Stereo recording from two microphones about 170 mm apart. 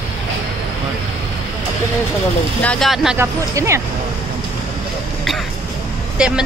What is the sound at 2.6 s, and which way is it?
Speech, 5° left (ahead or behind).